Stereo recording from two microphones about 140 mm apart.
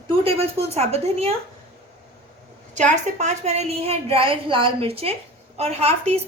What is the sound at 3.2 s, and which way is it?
A woman's voice, 55° right (ahead or behind).